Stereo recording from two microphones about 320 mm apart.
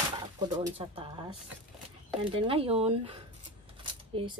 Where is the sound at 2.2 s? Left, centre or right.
Centre.